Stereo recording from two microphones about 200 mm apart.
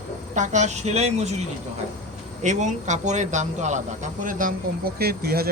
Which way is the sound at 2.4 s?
35° right (ahead or behind).